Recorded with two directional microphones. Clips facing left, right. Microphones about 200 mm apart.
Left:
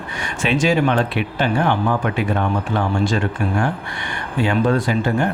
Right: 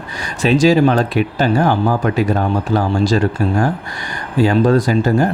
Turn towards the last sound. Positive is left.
turn(degrees=-40)  # may be behind; listen again after turning